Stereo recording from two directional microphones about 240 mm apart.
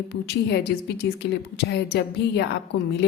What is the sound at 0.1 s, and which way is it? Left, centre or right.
A woman's voice, left.